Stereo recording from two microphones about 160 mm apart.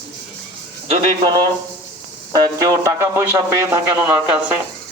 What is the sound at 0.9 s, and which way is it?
A man's voice, 35° right (ahead or behind).